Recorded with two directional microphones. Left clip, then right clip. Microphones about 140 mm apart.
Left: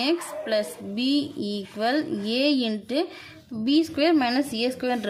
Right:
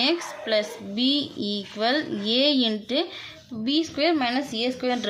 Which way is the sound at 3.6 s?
40° left (ahead or behind).